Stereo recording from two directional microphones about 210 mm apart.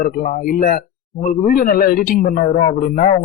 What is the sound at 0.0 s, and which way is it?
Speech, 35° left (ahead or behind).